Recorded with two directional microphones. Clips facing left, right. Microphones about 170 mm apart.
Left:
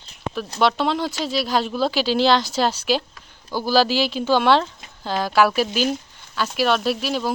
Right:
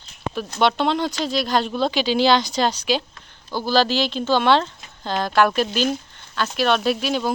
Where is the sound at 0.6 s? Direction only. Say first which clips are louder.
Right 1 dB; centre (ahead or behind).